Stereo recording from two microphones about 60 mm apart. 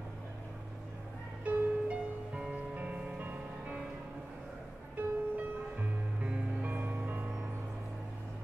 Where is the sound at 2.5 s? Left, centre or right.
Right.